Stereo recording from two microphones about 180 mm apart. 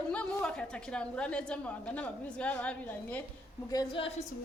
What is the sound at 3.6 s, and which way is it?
Speech, 25° left (ahead or behind).